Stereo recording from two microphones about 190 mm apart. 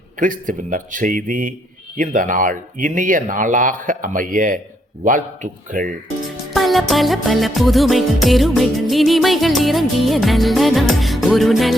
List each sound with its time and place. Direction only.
0.2 s speech: 45° right (ahead or behind)
6.2 s music: centre (ahead or behind)